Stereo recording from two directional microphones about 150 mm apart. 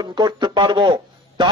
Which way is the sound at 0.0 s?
30° right (ahead or behind).